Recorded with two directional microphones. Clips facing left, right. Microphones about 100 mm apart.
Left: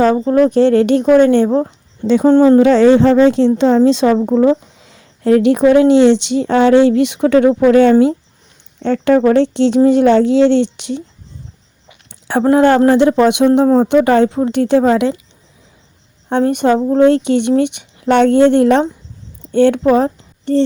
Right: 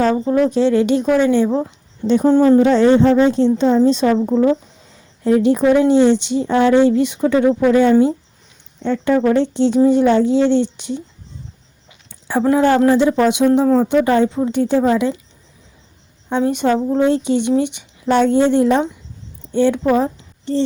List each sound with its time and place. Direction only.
0.0 s speech: 50° left (ahead or behind)
2.0 s a woman's voice: 80° left
4.8 s a woman's voice: 80° left
12.4 s a woman's voice: 55° left (ahead or behind)
16.3 s a woman's voice: 55° left (ahead or behind)